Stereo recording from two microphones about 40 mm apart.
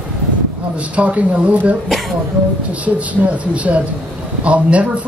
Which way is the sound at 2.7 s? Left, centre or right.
Right.